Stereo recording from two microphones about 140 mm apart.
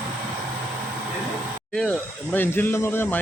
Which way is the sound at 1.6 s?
5° left (ahead or behind).